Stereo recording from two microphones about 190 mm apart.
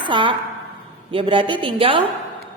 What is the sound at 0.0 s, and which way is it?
A woman's voice, 25° right (ahead or behind).